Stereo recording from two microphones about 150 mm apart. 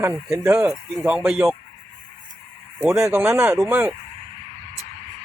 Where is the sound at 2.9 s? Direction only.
15° right (ahead or behind).